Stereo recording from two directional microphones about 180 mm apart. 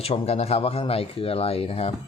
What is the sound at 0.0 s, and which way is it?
Speech, 35° left (ahead or behind).